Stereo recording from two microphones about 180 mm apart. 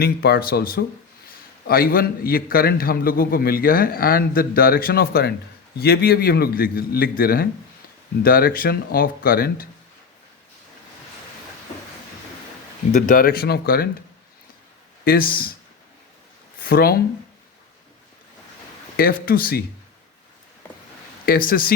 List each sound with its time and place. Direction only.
0.0 s a man's voice: 60° left (ahead or behind)
12.9 s a man's voice: 45° left (ahead or behind)
15.0 s a man's voice: 55° left (ahead or behind)
16.6 s a man's voice: 55° left (ahead or behind)
18.9 s a man's voice: 55° left (ahead or behind)
21.2 s speech: 55° left (ahead or behind)